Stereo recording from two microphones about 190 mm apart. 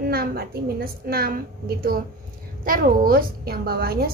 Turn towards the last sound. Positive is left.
turn(degrees=-55)  # may be behind; listen again after turning